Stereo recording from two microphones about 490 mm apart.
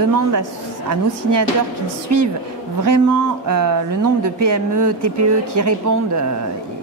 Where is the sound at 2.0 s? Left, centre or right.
Right.